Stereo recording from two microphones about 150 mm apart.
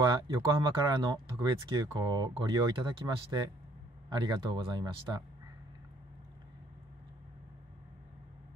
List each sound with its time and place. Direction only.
0.0 s speech: 30° right (ahead or behind)